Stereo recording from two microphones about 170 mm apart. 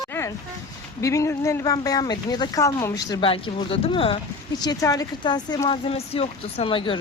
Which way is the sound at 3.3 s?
35° left (ahead or behind).